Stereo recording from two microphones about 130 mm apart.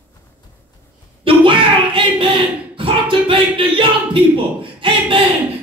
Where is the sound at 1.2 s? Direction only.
40° right (ahead or behind).